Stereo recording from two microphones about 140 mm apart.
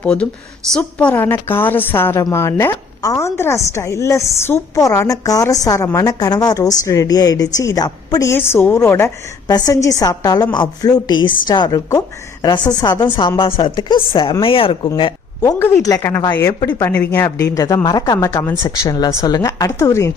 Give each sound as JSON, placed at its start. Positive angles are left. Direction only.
{"t": 0.0, "sound": "a woman's voice", "side_deg": 10}
{"t": 9.5, "sound": "a woman's voice", "side_deg": 30}
{"t": 15.4, "sound": "a woman's voice", "side_deg": 20}